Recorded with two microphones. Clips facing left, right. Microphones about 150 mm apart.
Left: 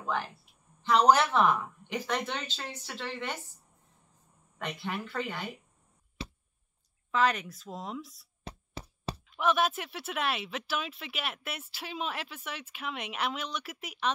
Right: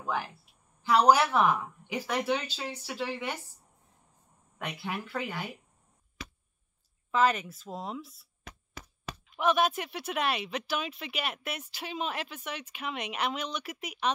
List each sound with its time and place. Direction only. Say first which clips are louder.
0.0 s a woman's voice: even; 10° right (ahead or behind)
4.6 s speech: even; 5° right (ahead or behind)
6.2 s a sound: left 4 dB; 30° left (ahead or behind)
7.1 s speech: right 2 dB; centre (ahead or behind)
8.5 s a sound: left 4 dB; 30° left (ahead or behind)
9.3 s speech: right 2 dB; centre (ahead or behind)